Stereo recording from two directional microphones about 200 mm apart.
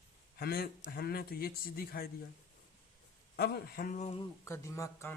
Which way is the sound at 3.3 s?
50° left (ahead or behind).